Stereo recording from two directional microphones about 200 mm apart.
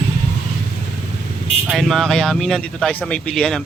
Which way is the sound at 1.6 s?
Centre (ahead or behind).